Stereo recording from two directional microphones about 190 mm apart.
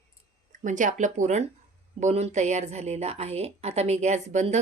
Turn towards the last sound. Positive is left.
turn(degrees=-40)  # may be behind; listen again after turning